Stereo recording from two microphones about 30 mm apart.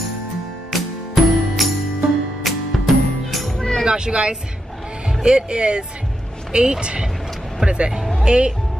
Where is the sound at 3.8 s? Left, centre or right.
Right.